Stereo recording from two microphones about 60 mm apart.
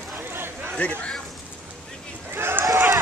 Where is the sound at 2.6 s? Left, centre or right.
Right.